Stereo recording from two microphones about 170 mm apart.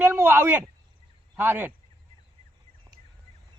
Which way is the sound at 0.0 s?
10° right (ahead or behind).